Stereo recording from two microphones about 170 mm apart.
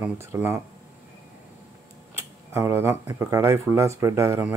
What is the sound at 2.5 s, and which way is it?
Speech, 15° right (ahead or behind).